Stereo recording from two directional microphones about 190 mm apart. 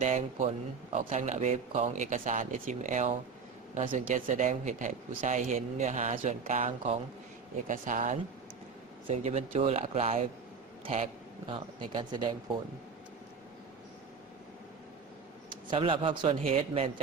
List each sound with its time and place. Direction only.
0.0 s speech: 40° right (ahead or behind)
7.7 s speech: 45° right (ahead or behind); by 12.5 s 25° right (ahead or behind)
15.7 s speech: 25° right (ahead or behind)